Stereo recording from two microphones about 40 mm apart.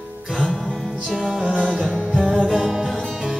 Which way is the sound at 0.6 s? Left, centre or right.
Centre.